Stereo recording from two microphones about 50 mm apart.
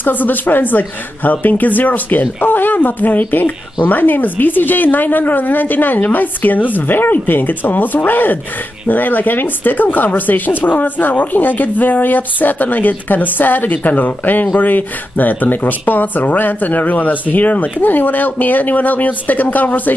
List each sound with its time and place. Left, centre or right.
0.0 s speech: left